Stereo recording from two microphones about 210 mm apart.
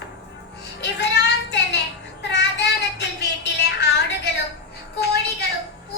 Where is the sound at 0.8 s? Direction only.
55° left (ahead or behind).